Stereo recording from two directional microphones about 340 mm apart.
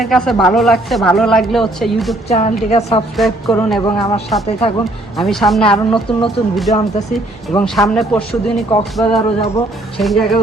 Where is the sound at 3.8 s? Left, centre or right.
Centre.